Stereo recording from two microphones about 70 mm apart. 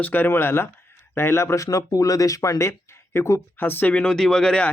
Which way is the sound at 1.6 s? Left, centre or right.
Left.